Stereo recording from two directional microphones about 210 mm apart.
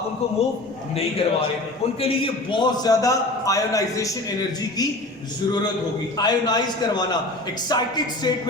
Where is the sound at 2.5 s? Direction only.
20° left (ahead or behind).